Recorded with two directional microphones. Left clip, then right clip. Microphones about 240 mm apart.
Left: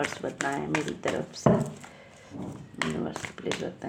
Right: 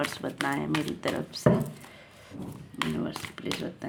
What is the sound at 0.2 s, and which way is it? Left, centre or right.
Speech, right.